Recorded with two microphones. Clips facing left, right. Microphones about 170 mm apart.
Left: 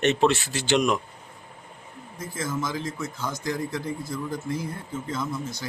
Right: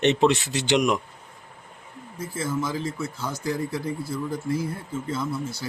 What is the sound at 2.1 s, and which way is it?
Speech, 10° right (ahead or behind).